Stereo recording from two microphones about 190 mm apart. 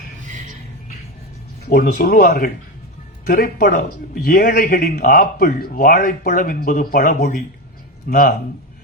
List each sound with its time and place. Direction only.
0.2 s music: 40° right (ahead or behind)
1.7 s a man's voice: 50° left (ahead or behind)